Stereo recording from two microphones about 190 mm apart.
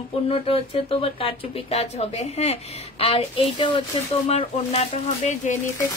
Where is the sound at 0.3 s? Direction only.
30° left (ahead or behind).